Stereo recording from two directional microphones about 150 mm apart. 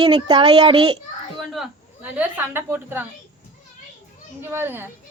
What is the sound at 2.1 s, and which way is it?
Speech, 10° right (ahead or behind).